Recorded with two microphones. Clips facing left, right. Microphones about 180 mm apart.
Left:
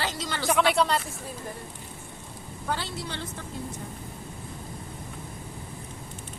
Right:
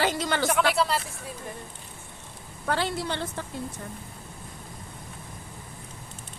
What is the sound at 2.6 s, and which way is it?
Speech, 60° right (ahead or behind).